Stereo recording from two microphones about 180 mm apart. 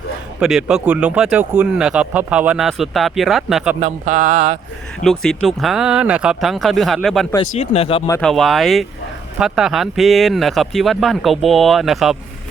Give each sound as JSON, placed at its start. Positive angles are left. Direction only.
{"t": 0.3, "sound": "speech", "side_deg": -5}
{"t": 3.8, "sound": "speech", "side_deg": -40}
{"t": 5.0, "sound": "speech", "side_deg": 0}
{"t": 7.3, "sound": "speech", "side_deg": 35}
{"t": 8.2, "sound": "speech", "side_deg": 0}